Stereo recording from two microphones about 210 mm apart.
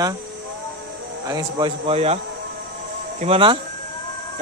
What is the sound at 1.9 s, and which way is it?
Speech, 30° right (ahead or behind).